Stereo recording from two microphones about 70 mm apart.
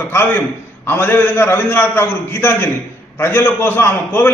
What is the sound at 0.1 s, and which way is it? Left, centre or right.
A man's voice, left.